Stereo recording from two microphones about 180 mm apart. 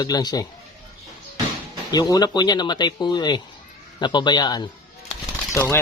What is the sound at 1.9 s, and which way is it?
A man's voice, 20° left (ahead or behind).